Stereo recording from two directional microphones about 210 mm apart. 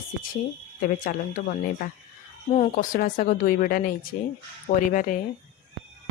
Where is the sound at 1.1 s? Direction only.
40° left (ahead or behind).